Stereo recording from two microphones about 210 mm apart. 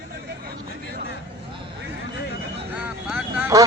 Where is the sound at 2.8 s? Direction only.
5° right (ahead or behind).